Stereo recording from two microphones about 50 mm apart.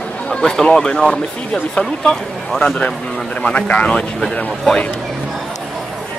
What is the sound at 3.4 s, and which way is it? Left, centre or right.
Speech, left.